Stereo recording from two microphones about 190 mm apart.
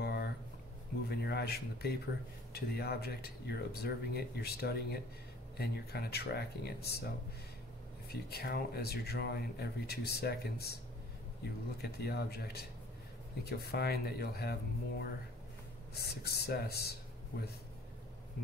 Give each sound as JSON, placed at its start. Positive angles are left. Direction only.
{"t": 0.0, "sound": "a sound", "side_deg": 55}
{"t": 2.5, "sound": "speech", "side_deg": 55}
{"t": 8.1, "sound": "speech", "side_deg": 55}
{"t": 11.8, "sound": "speech", "side_deg": 55}